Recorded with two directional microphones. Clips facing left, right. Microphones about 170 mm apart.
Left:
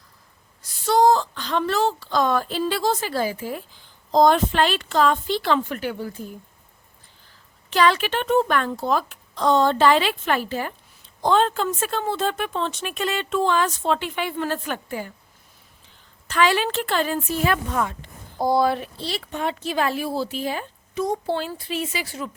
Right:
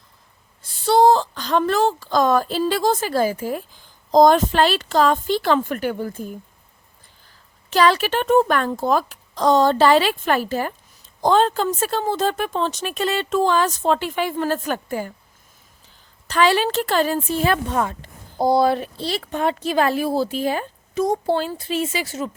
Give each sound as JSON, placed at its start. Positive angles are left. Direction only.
{"t": 0.6, "sound": "a woman's voice", "side_deg": -30}
{"t": 7.7, "sound": "a woman's voice", "side_deg": -35}
{"t": 16.2, "sound": "a woman's voice", "side_deg": -35}